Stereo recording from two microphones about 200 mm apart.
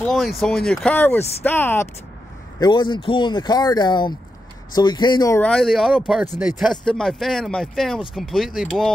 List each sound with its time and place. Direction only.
0.0 s speech: centre (ahead or behind)
2.6 s speech: 25° left (ahead or behind); by 8.9 s centre (ahead or behind)